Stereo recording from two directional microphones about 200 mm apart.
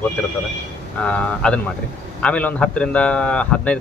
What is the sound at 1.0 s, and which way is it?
A man's voice, 5° left (ahead or behind).